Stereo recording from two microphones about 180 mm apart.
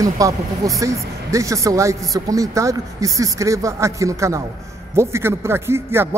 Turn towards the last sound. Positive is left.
turn(degrees=-15)  # may be behind; listen again after turning